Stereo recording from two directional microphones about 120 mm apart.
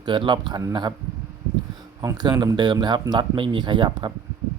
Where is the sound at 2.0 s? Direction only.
30° right (ahead or behind).